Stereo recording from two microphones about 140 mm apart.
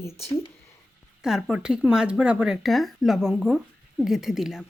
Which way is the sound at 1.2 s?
5° right (ahead or behind).